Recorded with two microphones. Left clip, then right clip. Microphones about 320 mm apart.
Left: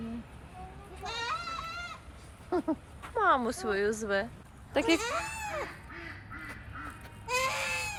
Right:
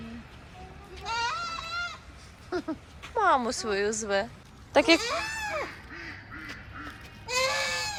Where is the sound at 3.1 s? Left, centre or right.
Centre.